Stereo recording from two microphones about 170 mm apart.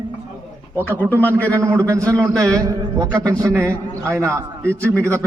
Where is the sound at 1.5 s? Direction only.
15° right (ahead or behind).